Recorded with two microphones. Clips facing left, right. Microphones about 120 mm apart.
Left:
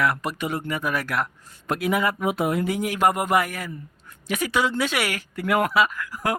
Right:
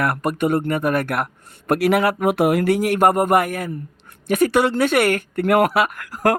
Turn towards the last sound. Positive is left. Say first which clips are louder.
# right 4 dB
turn(degrees=-60)  # may be behind; listen again after turning